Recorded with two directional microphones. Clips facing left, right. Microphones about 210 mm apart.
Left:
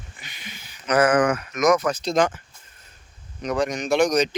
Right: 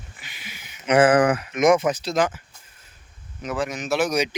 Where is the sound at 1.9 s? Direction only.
15° right (ahead or behind).